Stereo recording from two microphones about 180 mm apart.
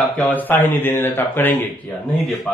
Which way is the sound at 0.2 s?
10° left (ahead or behind).